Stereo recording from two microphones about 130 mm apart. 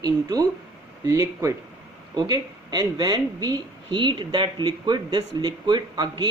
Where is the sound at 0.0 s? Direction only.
30° right (ahead or behind).